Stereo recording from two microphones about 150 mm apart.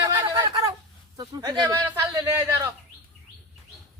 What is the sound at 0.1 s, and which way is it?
Fowl, 25° right (ahead or behind).